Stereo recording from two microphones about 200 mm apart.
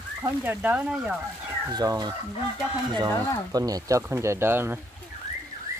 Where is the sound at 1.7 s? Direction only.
20° right (ahead or behind).